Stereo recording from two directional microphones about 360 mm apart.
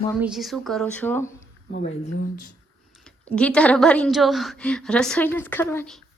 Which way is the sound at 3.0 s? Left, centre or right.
Centre.